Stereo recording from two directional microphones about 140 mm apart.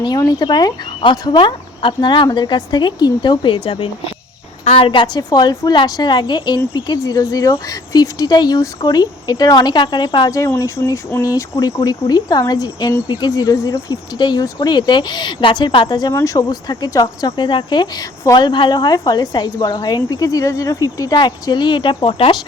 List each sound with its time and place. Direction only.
0.0 s speech: 30° left (ahead or behind)
14.2 s speech: 35° left (ahead or behind)
16.1 s speech: 20° left (ahead or behind)
18.4 s speech: 35° left (ahead or behind)